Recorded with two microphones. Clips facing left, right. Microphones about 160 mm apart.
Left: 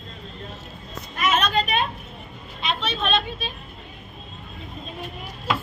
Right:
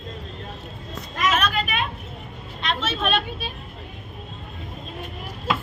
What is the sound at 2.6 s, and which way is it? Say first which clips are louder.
Speech: right 1 dB; centre (ahead or behind).